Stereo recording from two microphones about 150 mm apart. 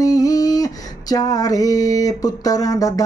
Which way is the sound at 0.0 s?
25° left (ahead or behind).